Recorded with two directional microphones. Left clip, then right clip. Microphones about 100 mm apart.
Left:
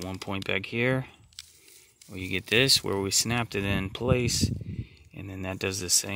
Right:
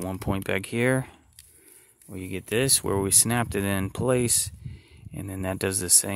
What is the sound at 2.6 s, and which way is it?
Speech, 25° right (ahead or behind).